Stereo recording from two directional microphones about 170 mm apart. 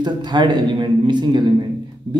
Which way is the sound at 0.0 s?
25° right (ahead or behind).